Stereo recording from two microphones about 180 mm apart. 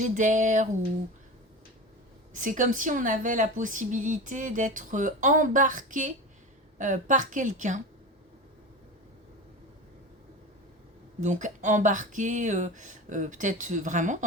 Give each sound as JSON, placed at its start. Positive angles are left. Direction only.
{"t": 0.0, "sound": "a woman's voice", "side_deg": -45}
{"t": 2.3, "sound": "a woman's voice", "side_deg": -45}
{"t": 11.2, "sound": "a woman's voice", "side_deg": -45}